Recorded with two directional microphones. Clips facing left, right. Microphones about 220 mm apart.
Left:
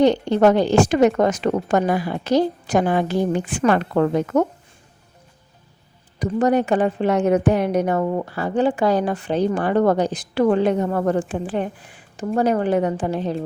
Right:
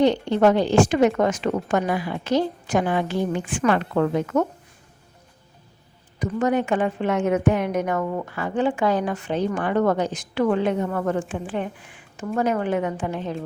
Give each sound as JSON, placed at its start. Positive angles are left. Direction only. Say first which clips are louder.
{"t": 0.0, "sound": "a woman's voice", "louder": "left 3 dB", "side_deg": 40}
{"t": 6.1, "sound": "a woman's voice", "louder": "left 4 dB", "side_deg": 35}